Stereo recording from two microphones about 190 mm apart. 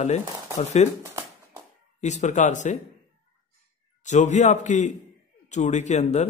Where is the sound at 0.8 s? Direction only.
35° left (ahead or behind).